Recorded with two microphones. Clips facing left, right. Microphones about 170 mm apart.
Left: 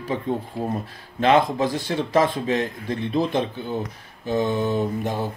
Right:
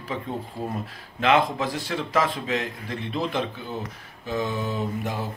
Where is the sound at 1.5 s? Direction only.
25° left (ahead or behind).